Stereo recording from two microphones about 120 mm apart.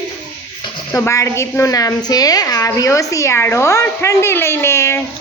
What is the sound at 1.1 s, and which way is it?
A woman's voice, 25° left (ahead or behind).